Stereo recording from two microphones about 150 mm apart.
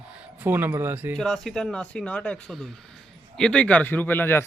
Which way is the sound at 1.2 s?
5° left (ahead or behind).